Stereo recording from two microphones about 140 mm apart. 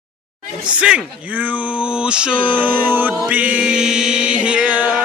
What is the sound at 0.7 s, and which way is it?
Speech, 5° right (ahead or behind).